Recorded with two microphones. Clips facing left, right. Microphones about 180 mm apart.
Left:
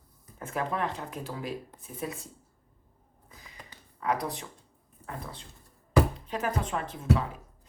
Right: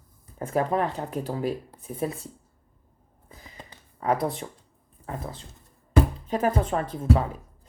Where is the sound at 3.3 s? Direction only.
30° right (ahead or behind).